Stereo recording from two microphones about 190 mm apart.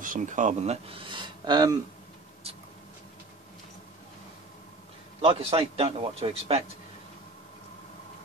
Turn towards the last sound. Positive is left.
turn(degrees=-30)  # may be behind; listen again after turning